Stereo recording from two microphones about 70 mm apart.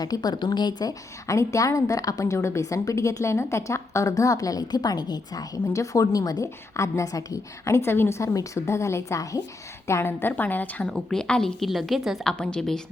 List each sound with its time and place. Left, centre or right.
0.0 s a woman's voice: left
1.3 s a woman's voice: left
5.7 s a woman's voice: left
8.2 s a woman's voice: left
9.8 s a woman's voice: left
10.9 s a woman's voice: centre